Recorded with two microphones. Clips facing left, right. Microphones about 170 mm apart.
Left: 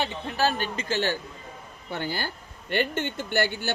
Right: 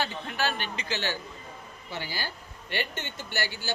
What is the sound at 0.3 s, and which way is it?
Speech, 40° left (ahead or behind).